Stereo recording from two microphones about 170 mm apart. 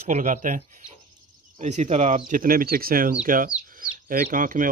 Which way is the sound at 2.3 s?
55° right (ahead or behind).